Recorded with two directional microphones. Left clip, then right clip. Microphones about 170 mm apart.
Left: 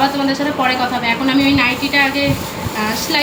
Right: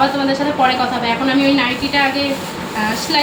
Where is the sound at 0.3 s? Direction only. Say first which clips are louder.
Right 1 dB; 15° left (ahead or behind).